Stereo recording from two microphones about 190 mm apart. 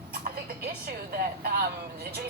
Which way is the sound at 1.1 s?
50° right (ahead or behind).